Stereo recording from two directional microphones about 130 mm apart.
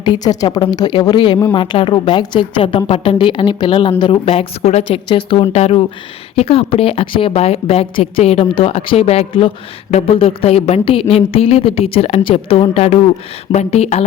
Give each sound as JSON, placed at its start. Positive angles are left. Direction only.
{"t": 0.0, "sound": "a woman's voice", "side_deg": 30}
{"t": 5.0, "sound": "a woman's voice", "side_deg": 40}